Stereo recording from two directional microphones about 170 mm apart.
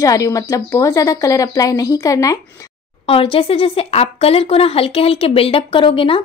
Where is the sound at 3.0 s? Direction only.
35° left (ahead or behind).